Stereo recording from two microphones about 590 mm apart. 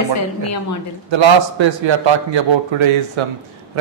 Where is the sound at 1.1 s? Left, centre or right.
Right.